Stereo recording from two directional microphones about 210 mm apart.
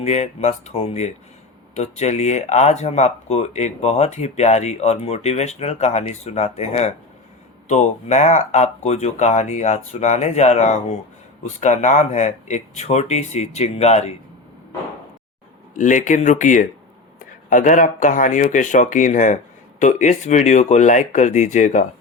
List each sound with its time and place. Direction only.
0.0 s speech: 30° left (ahead or behind)
15.8 s speech: 35° left (ahead or behind)